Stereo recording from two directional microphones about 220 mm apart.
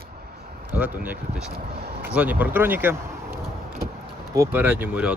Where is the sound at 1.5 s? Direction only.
45° right (ahead or behind).